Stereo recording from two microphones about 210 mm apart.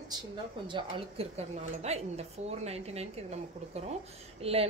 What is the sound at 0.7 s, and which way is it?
A woman's voice, 30° right (ahead or behind).